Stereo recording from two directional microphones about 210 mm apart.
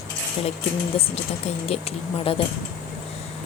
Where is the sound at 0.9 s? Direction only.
25° left (ahead or behind).